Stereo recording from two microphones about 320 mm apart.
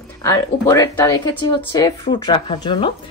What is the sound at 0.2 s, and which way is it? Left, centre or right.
Speech, centre.